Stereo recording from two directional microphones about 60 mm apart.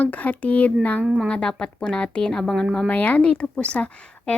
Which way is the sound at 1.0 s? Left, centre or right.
Centre.